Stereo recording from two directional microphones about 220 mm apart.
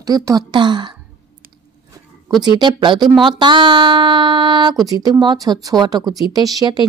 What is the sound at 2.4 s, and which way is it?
A woman's voice, 20° right (ahead or behind).